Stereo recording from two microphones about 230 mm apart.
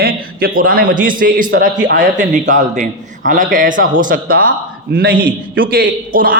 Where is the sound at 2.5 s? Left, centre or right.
Right.